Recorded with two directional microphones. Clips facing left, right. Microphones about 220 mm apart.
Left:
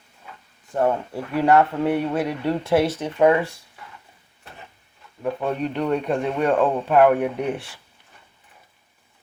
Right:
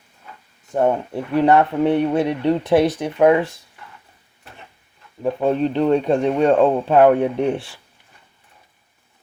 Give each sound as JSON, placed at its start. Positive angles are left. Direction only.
{"t": 0.7, "sound": "speech", "side_deg": -20}
{"t": 5.2, "sound": "speech", "side_deg": -30}